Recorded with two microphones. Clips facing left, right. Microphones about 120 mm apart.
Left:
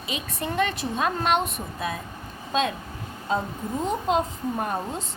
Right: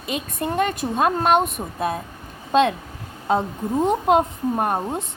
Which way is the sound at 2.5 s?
60° right (ahead or behind).